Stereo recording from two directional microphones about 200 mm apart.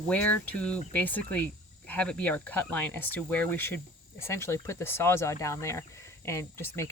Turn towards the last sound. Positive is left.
turn(degrees=15)  # may be behind; listen again after turning